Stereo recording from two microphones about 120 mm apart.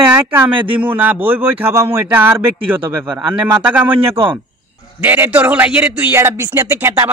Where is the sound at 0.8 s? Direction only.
15° right (ahead or behind).